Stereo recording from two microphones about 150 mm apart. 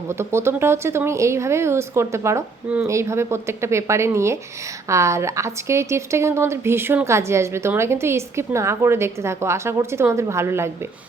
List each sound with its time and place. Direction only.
0.1 s a woman's voice: 15° right (ahead or behind)